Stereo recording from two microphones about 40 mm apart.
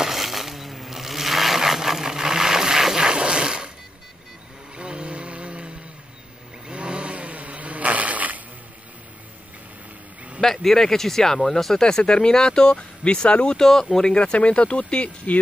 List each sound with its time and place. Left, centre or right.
0.0 s vehicle: centre; by 3.7 s right
4.7 s a sound: right
6.7 s vehicle: right
10.4 s speech: centre; by 13.6 s left
13.6 s speech: centre
14.1 s speech: left